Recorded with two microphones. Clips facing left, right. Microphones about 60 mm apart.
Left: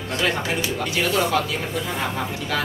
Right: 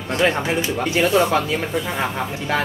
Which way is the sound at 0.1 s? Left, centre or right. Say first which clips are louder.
Right 4 dB; right.